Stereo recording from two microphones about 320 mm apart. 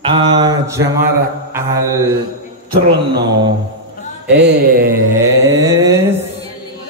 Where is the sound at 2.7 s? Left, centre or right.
Right.